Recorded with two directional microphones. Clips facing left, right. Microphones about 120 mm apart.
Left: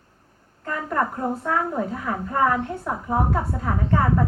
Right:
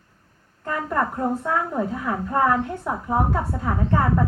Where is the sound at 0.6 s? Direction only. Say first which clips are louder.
Right 1 dB; 5° right (ahead or behind).